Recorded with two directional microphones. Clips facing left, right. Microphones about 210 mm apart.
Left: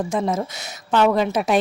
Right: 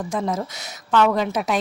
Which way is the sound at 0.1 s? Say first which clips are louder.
Left 2 dB; 25° left (ahead or behind).